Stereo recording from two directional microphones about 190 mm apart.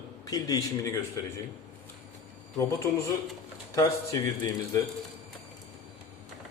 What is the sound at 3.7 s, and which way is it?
Speech, 15° left (ahead or behind).